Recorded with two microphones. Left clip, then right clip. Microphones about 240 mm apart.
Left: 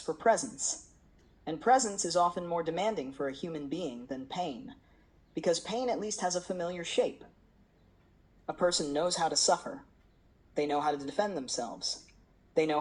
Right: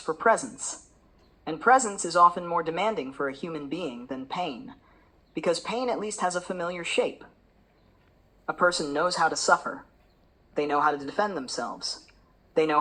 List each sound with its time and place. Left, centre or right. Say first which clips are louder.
0.0 s speech: right 5 dB; centre
8.4 s speech: right 6 dB; centre